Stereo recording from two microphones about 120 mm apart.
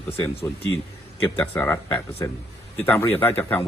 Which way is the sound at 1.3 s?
15° left (ahead or behind).